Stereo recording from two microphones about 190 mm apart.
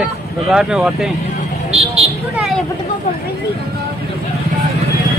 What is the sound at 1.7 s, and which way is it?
Vehicle, 30° right (ahead or behind).